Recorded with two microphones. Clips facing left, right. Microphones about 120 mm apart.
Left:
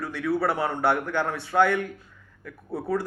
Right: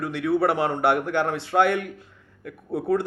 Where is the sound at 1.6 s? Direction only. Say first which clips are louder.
Right 1 dB; 65° right (ahead or behind).